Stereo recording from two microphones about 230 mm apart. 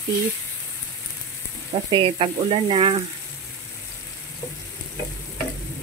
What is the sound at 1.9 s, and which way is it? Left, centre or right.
Speech, right.